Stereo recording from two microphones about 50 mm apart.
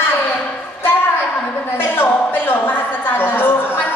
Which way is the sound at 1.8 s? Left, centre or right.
Left.